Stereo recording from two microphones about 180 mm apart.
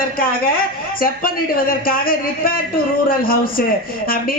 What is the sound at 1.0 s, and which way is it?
A man's voice, 55° left (ahead or behind).